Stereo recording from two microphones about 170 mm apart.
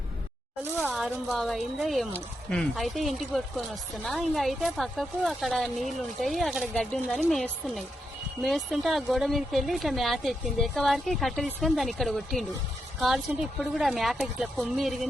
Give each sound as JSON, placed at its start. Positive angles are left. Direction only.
{"t": 0.8, "sound": "speech", "side_deg": 0}